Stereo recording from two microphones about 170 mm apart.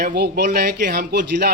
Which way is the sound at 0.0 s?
65° right (ahead or behind).